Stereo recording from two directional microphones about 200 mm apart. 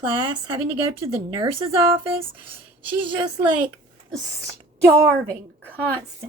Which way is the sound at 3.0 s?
25° right (ahead or behind).